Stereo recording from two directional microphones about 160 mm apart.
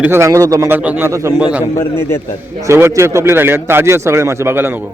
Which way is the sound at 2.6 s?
15° right (ahead or behind).